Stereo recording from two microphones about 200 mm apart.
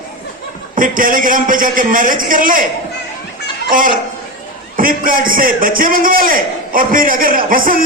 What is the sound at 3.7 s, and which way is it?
A man's voice, 45° right (ahead or behind).